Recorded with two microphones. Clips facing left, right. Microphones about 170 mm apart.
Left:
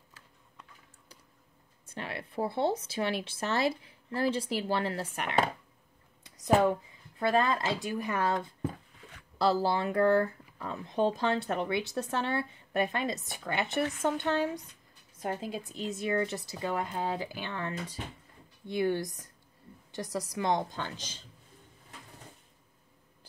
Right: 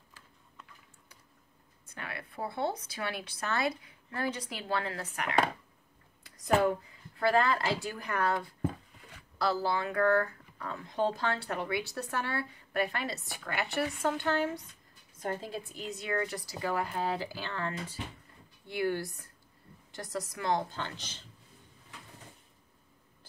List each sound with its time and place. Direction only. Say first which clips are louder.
2.0 s speech: left 5 dB; 25° left (ahead or behind)
6.2 s a sound: left 2 dB; 20° left (ahead or behind)
7.2 s speech: even; 20° left (ahead or behind)
9.4 s speech: left 3 dB; 30° left (ahead or behind); by 15.6 s 10° left (ahead or behind)
16.1 s speech: left 2 dB; 25° left (ahead or behind)